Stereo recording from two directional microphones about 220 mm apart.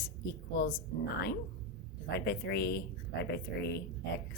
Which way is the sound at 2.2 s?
50° left (ahead or behind).